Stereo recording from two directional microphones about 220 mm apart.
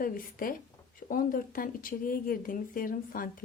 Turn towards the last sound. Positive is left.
turn(degrees=40)  # may be behind; listen again after turning